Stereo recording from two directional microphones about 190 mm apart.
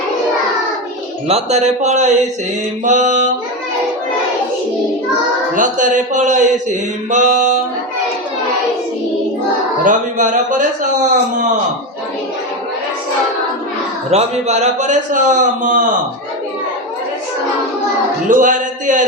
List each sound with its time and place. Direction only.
1.3 s mantra: 35° right (ahead or behind)
5.5 s mantra: 40° right (ahead or behind)
9.8 s speech: 40° right (ahead or behind)
14.1 s mantra: 35° right (ahead or behind)
18.3 s speech: 45° right (ahead or behind)